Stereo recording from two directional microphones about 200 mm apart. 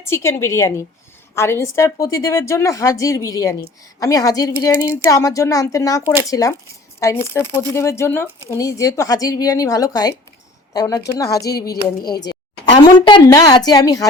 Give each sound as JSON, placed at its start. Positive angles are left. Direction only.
{"t": 0.0, "sound": "a woman's voice", "side_deg": 15}